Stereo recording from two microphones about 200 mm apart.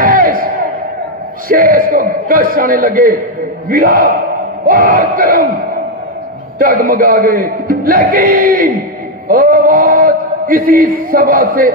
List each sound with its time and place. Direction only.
0.0 s crowd: 45° right (ahead or behind)
1.5 s speech: 45° right (ahead or behind)
6.6 s speech: 45° right (ahead or behind)